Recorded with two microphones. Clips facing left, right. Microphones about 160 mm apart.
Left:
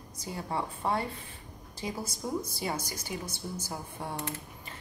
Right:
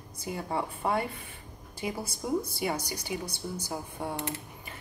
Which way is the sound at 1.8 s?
60° right (ahead or behind).